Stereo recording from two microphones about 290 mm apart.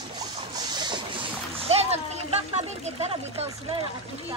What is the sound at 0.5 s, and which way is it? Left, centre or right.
Splash, centre.